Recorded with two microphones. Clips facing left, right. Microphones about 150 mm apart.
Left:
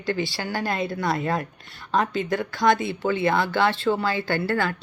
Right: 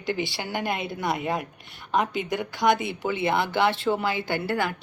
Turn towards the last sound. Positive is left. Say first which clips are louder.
# left 2 dB
turn(degrees=-20)  # may be behind; listen again after turning